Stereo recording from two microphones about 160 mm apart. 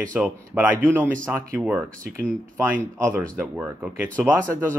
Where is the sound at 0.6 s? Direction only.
15° right (ahead or behind).